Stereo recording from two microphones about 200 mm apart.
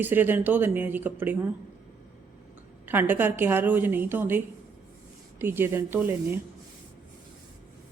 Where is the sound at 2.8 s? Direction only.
10° right (ahead or behind).